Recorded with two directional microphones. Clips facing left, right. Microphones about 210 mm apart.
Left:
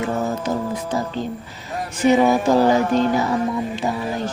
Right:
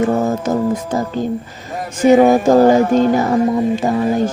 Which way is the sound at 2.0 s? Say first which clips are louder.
Right 6 dB; 50° right (ahead or behind).